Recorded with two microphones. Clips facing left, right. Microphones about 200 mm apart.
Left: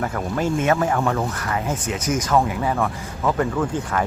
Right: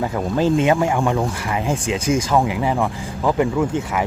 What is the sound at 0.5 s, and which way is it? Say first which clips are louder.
Speech: right 1 dB; 15° right (ahead or behind).